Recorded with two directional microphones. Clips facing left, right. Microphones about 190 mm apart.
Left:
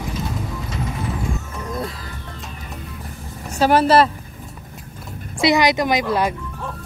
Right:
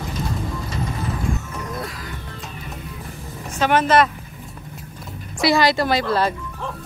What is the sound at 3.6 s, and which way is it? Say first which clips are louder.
Speech: left 2 dB; 35° left (ahead or behind).